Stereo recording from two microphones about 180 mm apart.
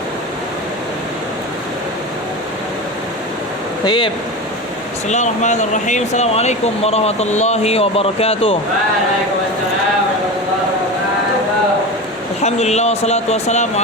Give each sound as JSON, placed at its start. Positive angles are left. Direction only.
{"t": 3.8, "sound": "speech", "side_deg": 25}
{"t": 5.0, "sound": "speech", "side_deg": 40}
{"t": 12.4, "sound": "speech", "side_deg": 40}